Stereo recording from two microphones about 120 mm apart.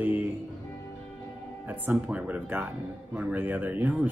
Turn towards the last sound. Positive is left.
turn(degrees=-15)  # may be behind; listen again after turning